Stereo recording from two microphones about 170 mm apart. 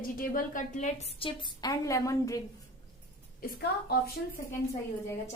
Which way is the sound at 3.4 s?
65° left (ahead or behind).